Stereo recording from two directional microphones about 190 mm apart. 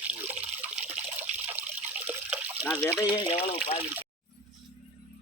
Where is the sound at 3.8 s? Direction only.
10° right (ahead or behind).